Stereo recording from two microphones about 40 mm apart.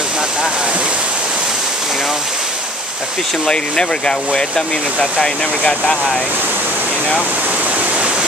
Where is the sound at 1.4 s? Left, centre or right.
Centre.